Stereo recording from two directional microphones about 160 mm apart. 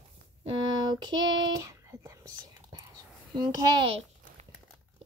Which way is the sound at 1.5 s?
20° right (ahead or behind).